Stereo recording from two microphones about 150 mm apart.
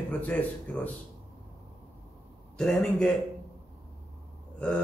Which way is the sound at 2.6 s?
5° left (ahead or behind).